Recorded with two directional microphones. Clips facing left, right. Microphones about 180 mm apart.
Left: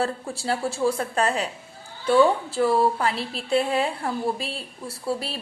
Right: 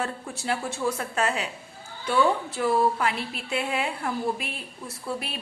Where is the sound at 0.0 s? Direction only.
30° left (ahead or behind).